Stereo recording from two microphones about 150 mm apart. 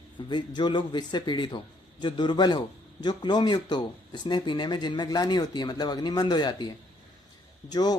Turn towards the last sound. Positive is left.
turn(degrees=25)  # may be behind; listen again after turning